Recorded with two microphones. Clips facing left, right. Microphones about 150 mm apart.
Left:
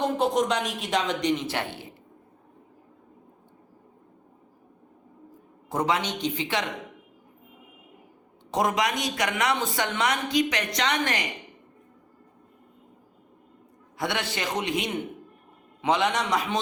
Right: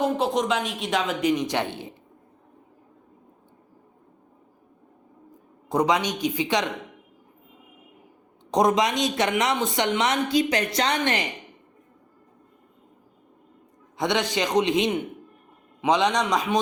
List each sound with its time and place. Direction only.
0.0 s speech: centre (ahead or behind)
1.4 s speech: 15° right (ahead or behind)
5.6 s speech: 15° right (ahead or behind)
8.4 s speech: 20° right (ahead or behind)
14.0 s speech: 20° right (ahead or behind)